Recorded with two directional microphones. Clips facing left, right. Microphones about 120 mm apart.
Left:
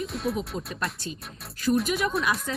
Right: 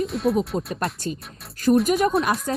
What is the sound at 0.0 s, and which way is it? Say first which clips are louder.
Speech: right 7 dB; centre (ahead or behind).